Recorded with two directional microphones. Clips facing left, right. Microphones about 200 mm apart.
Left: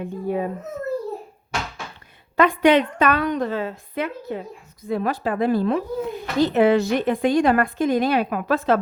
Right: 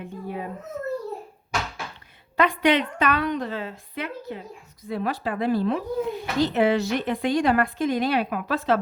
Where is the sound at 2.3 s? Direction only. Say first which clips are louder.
Left 5 dB; 45° left (ahead or behind).